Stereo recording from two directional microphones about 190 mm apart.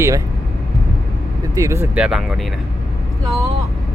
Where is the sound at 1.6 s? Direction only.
15° right (ahead or behind).